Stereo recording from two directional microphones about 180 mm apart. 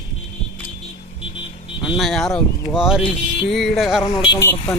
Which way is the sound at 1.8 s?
Centre (ahead or behind).